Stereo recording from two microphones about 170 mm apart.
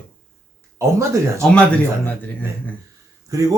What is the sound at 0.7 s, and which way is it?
Speech, 15° right (ahead or behind).